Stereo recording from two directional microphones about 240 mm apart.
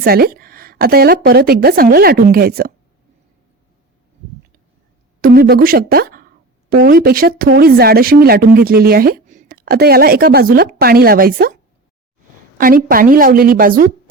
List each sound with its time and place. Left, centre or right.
0.0 s a woman's voice: right
5.2 s speech: right
12.5 s speech: right